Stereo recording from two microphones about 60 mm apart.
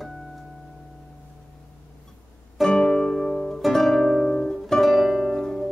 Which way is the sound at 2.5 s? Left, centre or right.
Centre.